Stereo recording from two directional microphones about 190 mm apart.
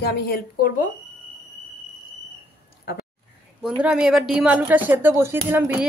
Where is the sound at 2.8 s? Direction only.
55° left (ahead or behind).